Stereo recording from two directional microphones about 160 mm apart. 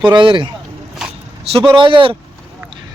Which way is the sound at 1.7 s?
30° right (ahead or behind).